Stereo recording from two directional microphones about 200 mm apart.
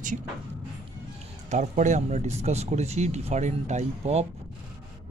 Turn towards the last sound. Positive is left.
turn(degrees=-35)  # may be behind; listen again after turning